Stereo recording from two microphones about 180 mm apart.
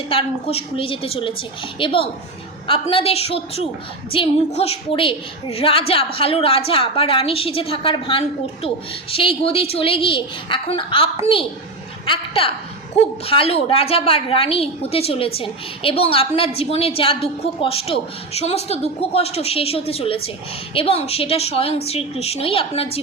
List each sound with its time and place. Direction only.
0.1 s a woman's voice: 30° left (ahead or behind)